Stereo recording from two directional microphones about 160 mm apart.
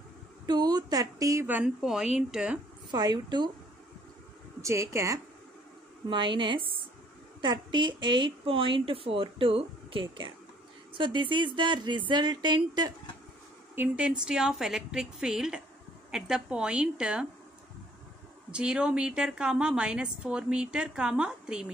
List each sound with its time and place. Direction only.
0.5 s speech: 25° right (ahead or behind); by 2.6 s 5° right (ahead or behind)
2.9 s speech: 25° right (ahead or behind)
4.6 s speech: 20° right (ahead or behind)
6.0 s a woman's voice: 30° right (ahead or behind)
13.7 s a woman's voice: 5° right (ahead or behind)
18.5 s a woman's voice: 5° right (ahead or behind)